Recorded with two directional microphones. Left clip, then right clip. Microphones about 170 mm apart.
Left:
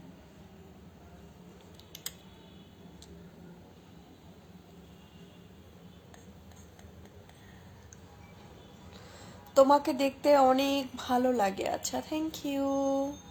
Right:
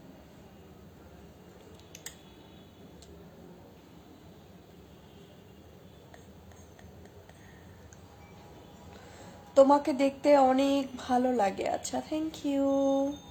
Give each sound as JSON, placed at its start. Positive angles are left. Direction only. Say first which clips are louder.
{"t": 9.6, "sound": "speech", "louder": "right 1 dB", "side_deg": 0}